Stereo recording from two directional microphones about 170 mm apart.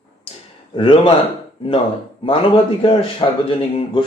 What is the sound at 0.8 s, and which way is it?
Speech, 30° left (ahead or behind).